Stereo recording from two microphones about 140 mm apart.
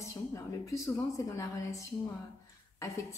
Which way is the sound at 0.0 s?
20° left (ahead or behind).